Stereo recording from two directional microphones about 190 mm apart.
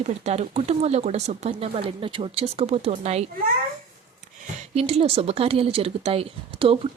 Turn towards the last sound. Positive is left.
turn(degrees=-30)  # may be behind; listen again after turning